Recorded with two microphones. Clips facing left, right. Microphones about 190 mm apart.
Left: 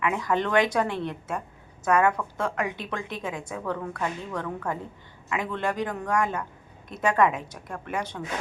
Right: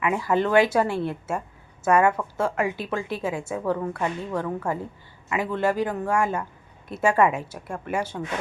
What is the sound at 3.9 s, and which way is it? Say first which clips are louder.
Speech: right 3 dB; 25° right (ahead or behind).